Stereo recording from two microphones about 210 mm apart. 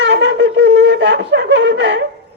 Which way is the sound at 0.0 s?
60° right (ahead or behind).